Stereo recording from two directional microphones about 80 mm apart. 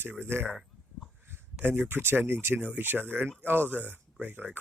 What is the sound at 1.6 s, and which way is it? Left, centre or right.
Speech, right.